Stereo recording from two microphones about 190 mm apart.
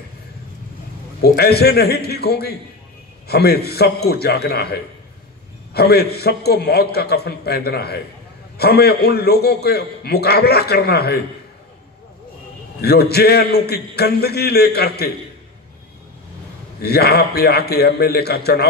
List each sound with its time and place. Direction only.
1.2 s a man's voice: 55° left (ahead or behind)
12.8 s a man's voice: 55° left (ahead or behind)
16.8 s a man's voice: 55° left (ahead or behind)